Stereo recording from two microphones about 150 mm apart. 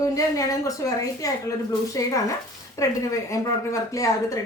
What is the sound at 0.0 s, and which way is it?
Speech, 20° left (ahead or behind).